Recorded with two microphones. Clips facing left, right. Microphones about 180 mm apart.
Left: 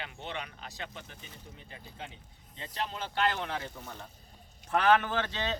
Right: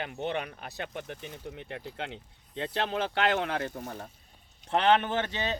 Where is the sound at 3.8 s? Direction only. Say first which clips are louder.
Right 6 dB; 45° right (ahead or behind).